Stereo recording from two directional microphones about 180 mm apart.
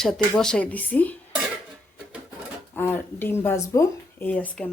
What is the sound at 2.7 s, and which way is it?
Speech, 10° left (ahead or behind).